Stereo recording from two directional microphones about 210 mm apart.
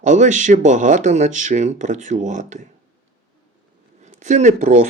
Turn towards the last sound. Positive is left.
turn(degrees=-40)  # may be behind; listen again after turning